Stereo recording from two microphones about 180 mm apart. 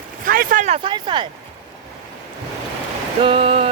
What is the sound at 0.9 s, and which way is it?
Speech, 25° right (ahead or behind).